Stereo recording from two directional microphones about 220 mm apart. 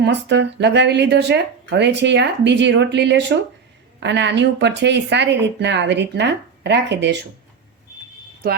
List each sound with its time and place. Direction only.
0.0 s speech: 50° right (ahead or behind)